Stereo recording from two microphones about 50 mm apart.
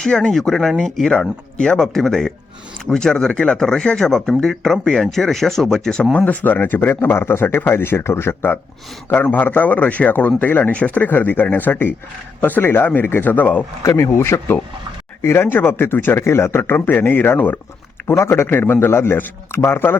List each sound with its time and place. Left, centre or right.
0.0 s speech: centre
6.1 s a man's voice: left
6.9 s a man's voice: left
13.8 s speech: left
16.2 s speech: left
18.1 s speech: left
18.4 s speech: left
18.9 s speech: left